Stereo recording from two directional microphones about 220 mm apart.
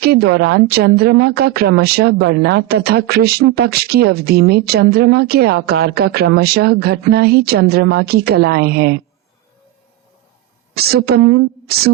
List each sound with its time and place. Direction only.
0.0 s a woman's voice: 45° right (ahead or behind)
10.8 s a woman's voice: 45° right (ahead or behind)